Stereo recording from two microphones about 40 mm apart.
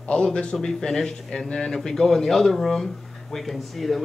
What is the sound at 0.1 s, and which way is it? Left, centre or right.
A man's voice, left.